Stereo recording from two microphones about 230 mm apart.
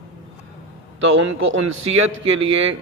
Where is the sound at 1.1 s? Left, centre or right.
Right.